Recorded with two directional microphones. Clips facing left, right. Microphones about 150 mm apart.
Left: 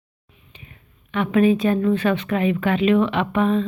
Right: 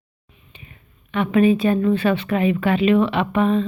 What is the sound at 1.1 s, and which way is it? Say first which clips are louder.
Speech: right 1 dB; centre (ahead or behind).